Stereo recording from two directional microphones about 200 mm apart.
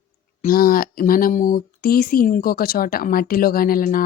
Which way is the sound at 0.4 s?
45° left (ahead or behind).